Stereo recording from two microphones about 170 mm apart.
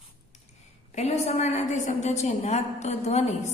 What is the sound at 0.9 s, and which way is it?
A woman's voice, 40° left (ahead or behind).